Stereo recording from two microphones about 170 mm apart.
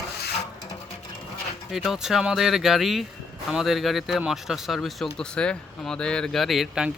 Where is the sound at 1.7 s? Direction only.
Centre (ahead or behind).